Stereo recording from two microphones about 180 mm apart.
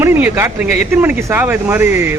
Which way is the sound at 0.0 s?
10° right (ahead or behind).